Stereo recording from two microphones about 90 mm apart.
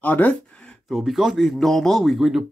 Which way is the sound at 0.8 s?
Centre (ahead or behind).